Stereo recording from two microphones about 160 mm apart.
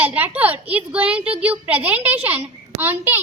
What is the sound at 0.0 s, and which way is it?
A child's voice, 10° right (ahead or behind).